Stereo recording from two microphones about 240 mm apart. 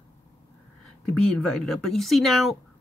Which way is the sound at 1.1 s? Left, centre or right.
Centre.